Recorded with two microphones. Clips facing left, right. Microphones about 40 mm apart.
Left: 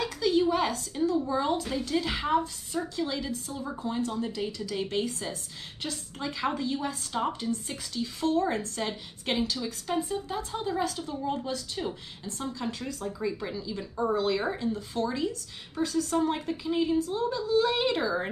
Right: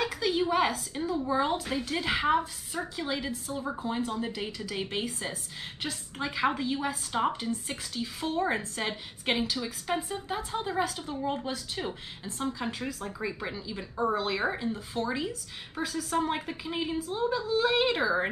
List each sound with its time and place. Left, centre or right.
0.0 s a woman's voice: centre